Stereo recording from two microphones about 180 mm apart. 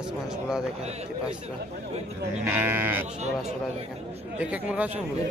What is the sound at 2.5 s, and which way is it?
Speech, 10° right (ahead or behind).